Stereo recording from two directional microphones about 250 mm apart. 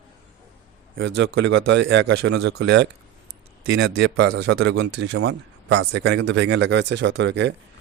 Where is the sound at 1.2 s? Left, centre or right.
Right.